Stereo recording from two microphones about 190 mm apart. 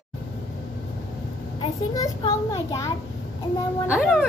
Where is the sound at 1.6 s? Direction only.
20° left (ahead or behind).